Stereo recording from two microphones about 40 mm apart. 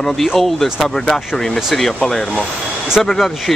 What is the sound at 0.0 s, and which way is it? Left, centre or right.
Speech, centre.